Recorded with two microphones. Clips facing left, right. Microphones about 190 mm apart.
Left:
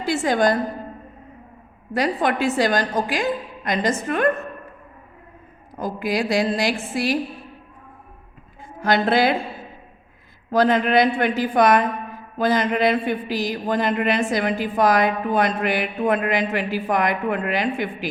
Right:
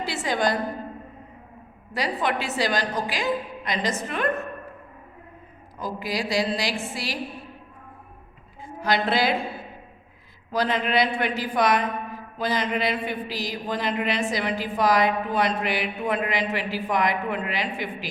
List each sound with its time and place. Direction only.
0.0 s a man's voice: 50° left (ahead or behind)
1.9 s a man's voice: 50° left (ahead or behind)
5.7 s a man's voice: 55° left (ahead or behind)
8.8 s a man's voice: 50° left (ahead or behind)
10.5 s a man's voice: 50° left (ahead or behind)